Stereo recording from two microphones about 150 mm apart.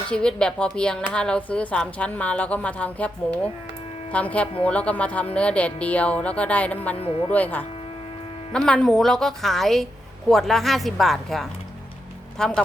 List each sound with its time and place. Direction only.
0.1 s speech: 5° left (ahead or behind)
7.0 s speech: 40° left (ahead or behind)
7.3 s a woman's voice: 10° left (ahead or behind)